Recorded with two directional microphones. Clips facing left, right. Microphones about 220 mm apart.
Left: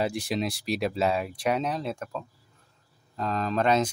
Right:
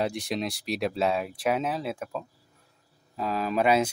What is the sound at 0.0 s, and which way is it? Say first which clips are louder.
Speech: left 1 dB; centre (ahead or behind).